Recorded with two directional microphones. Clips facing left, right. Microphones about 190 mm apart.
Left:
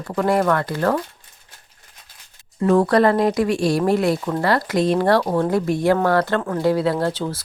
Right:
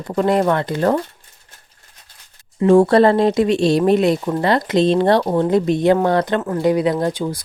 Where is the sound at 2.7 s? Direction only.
25° right (ahead or behind).